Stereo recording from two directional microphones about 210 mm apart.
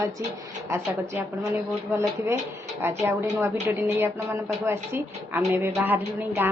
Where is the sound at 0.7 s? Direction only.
15° right (ahead or behind).